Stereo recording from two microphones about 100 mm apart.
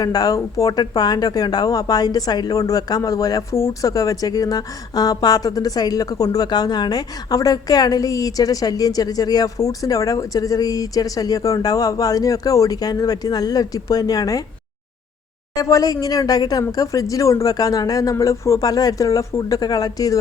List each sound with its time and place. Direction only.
0.0 s speech: 40° left (ahead or behind)
15.5 s speech: 35° left (ahead or behind)